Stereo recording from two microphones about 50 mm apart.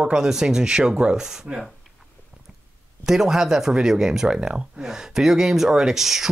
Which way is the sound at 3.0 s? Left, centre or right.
Centre.